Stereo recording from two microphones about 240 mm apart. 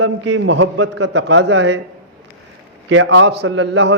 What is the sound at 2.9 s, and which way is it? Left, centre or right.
A man's voice, right.